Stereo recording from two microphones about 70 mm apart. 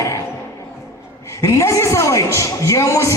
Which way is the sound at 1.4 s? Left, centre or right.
Left.